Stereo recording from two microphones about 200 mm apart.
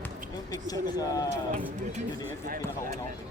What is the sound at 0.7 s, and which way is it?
Speech, 20° left (ahead or behind).